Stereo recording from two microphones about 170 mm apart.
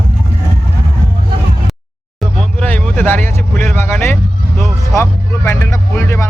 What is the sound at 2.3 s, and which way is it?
Vehicle, 10° left (ahead or behind).